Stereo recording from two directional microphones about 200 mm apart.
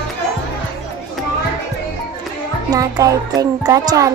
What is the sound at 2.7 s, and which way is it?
Music, 15° right (ahead or behind).